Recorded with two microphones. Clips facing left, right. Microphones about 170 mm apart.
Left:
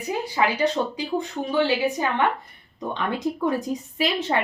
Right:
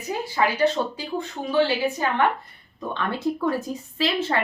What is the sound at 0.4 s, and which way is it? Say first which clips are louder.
Speech: right 1 dB; 15° left (ahead or behind).